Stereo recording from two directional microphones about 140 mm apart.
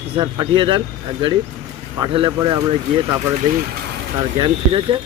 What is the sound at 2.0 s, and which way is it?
Speech, 40° right (ahead or behind).